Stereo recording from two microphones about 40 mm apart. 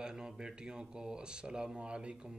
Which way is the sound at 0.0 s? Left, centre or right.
Centre.